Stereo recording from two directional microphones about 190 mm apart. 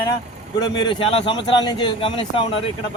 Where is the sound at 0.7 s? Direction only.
25° left (ahead or behind).